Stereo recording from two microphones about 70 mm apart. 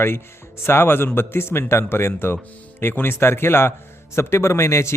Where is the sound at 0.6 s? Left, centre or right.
Left.